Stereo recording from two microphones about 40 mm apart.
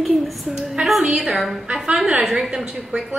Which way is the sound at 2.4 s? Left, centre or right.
Centre.